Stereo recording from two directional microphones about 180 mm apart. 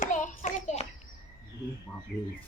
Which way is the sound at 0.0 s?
45° left (ahead or behind).